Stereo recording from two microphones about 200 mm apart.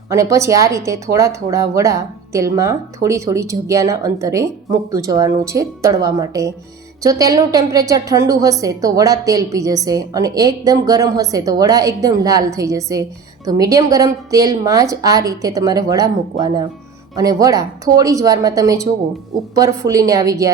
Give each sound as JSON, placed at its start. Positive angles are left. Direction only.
{"t": 0.1, "sound": "a woman's voice", "side_deg": -15}